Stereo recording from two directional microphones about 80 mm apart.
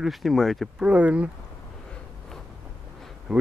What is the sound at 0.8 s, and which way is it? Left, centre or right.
Speech, centre.